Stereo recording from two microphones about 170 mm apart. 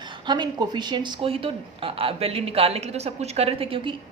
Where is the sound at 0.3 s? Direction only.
25° right (ahead or behind).